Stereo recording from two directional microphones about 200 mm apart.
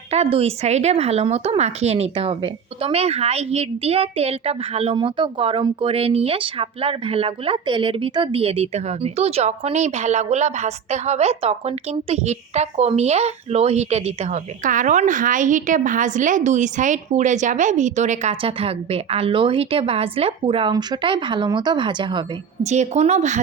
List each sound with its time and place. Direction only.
0.1 s speech: 30° right (ahead or behind)
22.6 s speech: 35° right (ahead or behind)